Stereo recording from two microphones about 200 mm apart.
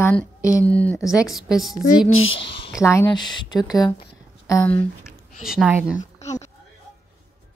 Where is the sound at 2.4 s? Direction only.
25° left (ahead or behind).